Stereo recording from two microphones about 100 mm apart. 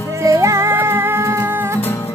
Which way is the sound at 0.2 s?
30° right (ahead or behind).